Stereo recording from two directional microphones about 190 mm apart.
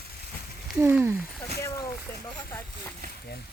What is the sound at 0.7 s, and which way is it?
Speech, 10° right (ahead or behind).